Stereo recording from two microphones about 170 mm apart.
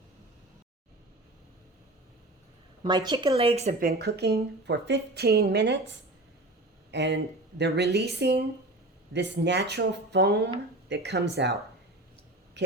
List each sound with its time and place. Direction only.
2.8 s a woman's voice: 25° right (ahead or behind)
3.8 s a woman's voice: 65° right (ahead or behind); by 5.8 s 85° right
6.9 s speech: 90° right
12.6 s a man's voice: 90° right